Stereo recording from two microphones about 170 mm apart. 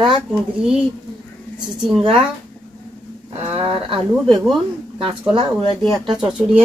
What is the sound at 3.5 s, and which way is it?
Speech, 30° right (ahead or behind).